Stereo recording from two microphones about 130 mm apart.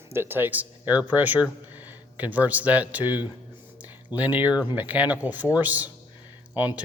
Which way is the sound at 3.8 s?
10° right (ahead or behind).